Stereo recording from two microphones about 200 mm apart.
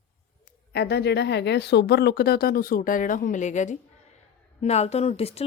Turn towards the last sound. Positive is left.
turn(degrees=30)  # may be behind; listen again after turning